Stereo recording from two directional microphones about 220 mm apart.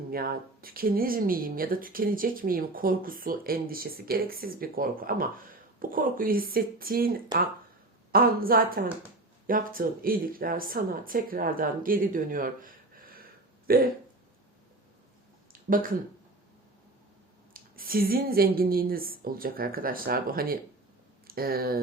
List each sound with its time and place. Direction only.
0.1 s speech: 45° right (ahead or behind)
15.5 s speech: 40° right (ahead or behind)
17.5 s speech: 40° right (ahead or behind)